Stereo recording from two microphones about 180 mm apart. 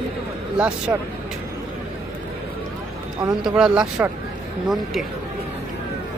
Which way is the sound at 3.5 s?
5° right (ahead or behind).